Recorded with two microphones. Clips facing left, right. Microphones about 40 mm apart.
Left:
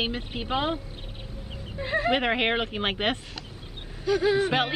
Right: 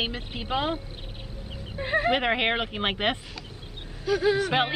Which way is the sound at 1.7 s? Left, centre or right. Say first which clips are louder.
Right 1 dB; centre.